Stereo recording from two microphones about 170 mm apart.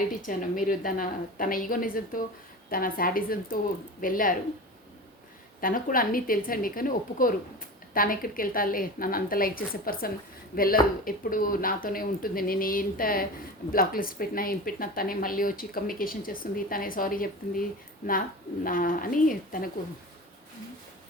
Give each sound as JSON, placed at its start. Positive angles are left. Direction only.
{"t": 0.1, "sound": "a woman's voice", "side_deg": 50}
{"t": 5.5, "sound": "speech", "side_deg": 55}